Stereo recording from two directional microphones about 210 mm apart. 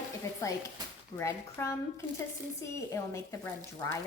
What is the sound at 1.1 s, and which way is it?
A woman's voice, 10° left (ahead or behind).